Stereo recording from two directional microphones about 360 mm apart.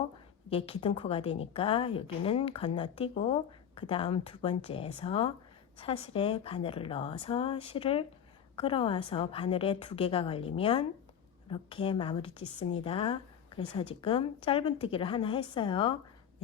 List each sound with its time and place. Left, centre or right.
0.5 s a woman's voice: centre